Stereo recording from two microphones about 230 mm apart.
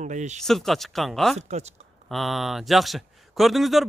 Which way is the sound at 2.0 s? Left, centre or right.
Centre.